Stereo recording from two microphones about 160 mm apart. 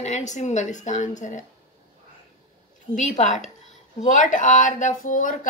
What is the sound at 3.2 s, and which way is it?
A woman's voice, 50° left (ahead or behind).